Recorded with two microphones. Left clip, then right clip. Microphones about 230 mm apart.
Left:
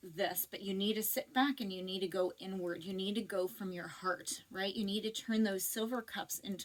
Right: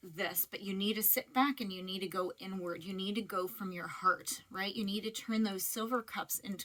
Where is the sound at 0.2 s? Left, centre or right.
Right.